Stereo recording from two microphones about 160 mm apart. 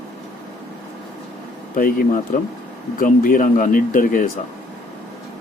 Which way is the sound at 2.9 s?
60° left (ahead or behind).